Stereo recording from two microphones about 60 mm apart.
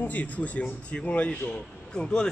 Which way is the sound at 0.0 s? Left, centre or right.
Left.